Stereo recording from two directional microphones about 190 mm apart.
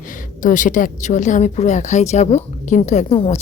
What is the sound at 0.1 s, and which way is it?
A woman's voice, 45° left (ahead or behind).